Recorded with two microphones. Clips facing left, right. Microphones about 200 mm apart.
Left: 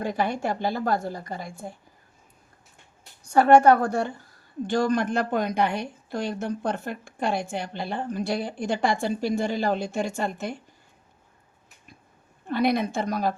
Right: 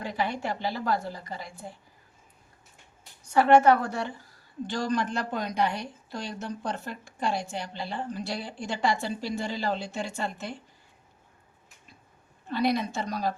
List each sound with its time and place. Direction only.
0.0 s a woman's voice: 45° left (ahead or behind)
3.2 s a woman's voice: 45° left (ahead or behind)
12.5 s a woman's voice: 55° left (ahead or behind)